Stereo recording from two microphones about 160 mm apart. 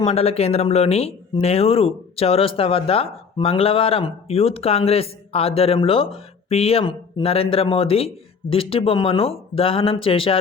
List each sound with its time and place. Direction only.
0.1 s speech: 40° left (ahead or behind)